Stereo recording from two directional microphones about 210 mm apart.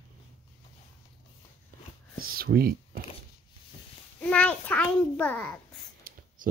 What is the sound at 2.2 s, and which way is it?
Whispering, 45° right (ahead or behind).